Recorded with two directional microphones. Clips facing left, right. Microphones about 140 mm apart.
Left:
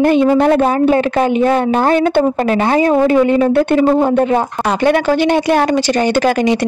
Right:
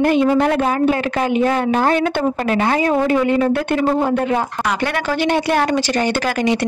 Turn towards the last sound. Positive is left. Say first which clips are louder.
# left 5 dB
turn(degrees=20)  # may be behind; listen again after turning